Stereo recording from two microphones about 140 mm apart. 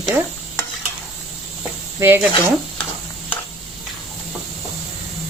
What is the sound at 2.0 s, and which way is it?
Speech, 20° right (ahead or behind).